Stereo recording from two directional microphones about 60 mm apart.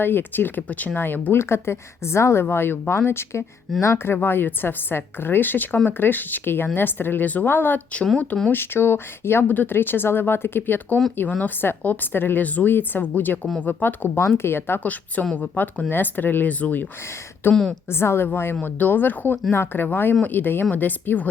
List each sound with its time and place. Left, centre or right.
0.0 s a woman's voice: left
1.4 s a woman's voice: left
14.2 s speech: left
14.8 s a woman's voice: left
17.5 s a woman's voice: centre
17.8 s speech: left
18.6 s a woman's voice: left